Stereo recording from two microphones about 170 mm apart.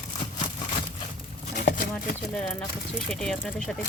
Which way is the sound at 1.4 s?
50° left (ahead or behind).